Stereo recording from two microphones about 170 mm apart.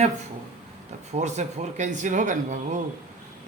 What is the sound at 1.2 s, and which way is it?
Speech, 40° right (ahead or behind).